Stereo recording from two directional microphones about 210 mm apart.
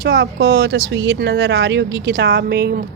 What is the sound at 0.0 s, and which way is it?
Speech, 50° right (ahead or behind).